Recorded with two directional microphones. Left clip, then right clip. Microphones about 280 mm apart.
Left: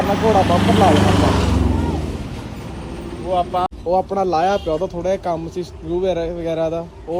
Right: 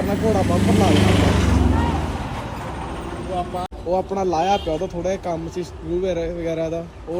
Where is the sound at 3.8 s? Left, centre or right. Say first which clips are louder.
Left 1 dB; centre.